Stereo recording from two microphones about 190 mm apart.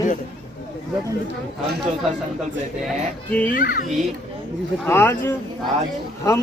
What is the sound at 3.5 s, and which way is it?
Speech, 45° left (ahead or behind).